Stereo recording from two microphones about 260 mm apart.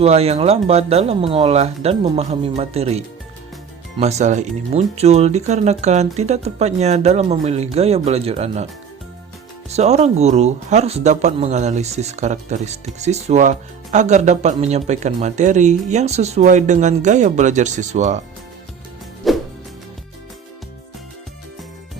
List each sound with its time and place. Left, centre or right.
0.0 s speech: right
9.6 s speech: right
19.2 s music: centre